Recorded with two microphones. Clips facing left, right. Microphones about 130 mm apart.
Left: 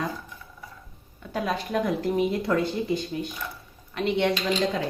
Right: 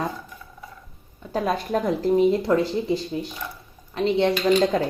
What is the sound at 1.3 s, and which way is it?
Speech, 35° right (ahead or behind).